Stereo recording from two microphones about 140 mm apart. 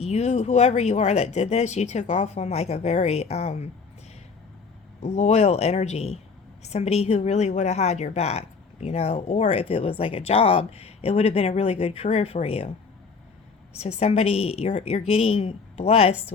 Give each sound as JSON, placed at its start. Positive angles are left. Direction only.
{"t": 0.0, "sound": "speech", "side_deg": 50}
{"t": 5.0, "sound": "speech", "side_deg": 55}
{"t": 13.7, "sound": "speech", "side_deg": 50}